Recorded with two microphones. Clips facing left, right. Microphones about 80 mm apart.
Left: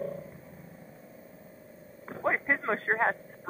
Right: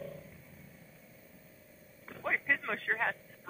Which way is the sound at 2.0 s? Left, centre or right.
Left.